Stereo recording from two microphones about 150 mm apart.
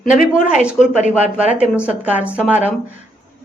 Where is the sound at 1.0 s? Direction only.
55° left (ahead or behind).